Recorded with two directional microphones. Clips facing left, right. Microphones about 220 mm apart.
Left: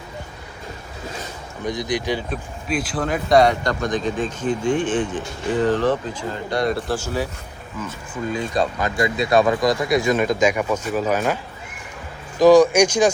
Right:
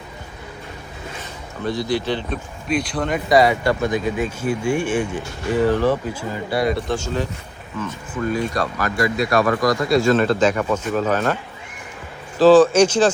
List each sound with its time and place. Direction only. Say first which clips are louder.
1.6 s speech: right 2 dB; 15° left (ahead or behind)
2.3 s speech: right 2 dB; 5° left (ahead or behind)
8.3 s speech: left 1 dB; 20° left (ahead or behind)
12.4 s speech: right 1 dB; 15° left (ahead or behind)